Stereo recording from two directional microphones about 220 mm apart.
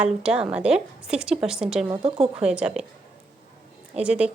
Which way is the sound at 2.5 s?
5° right (ahead or behind).